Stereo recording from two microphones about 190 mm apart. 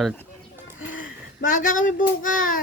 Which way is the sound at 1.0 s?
45° left (ahead or behind).